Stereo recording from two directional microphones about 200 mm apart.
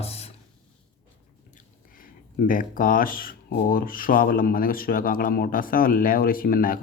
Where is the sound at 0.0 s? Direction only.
30° left (ahead or behind).